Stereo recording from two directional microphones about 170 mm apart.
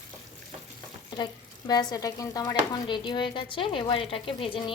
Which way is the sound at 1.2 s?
25° left (ahead or behind).